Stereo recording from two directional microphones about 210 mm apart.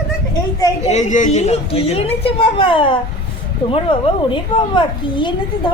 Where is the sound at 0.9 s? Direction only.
35° left (ahead or behind).